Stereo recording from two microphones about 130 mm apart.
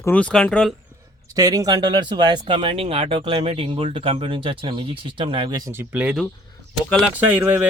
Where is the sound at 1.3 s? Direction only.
30° right (ahead or behind).